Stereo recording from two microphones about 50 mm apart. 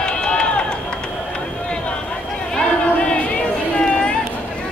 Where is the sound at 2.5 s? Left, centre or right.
Centre.